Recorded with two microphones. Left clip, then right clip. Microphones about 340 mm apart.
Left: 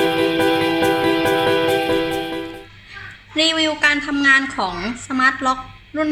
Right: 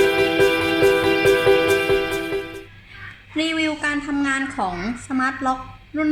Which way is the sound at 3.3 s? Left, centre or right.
Left.